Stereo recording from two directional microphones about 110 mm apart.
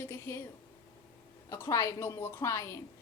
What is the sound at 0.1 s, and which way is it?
Speech, 25° left (ahead or behind).